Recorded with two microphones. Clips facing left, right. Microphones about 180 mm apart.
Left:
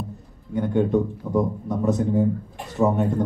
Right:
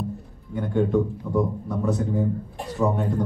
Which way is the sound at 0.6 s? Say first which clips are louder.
Left 1 dB; 20° left (ahead or behind).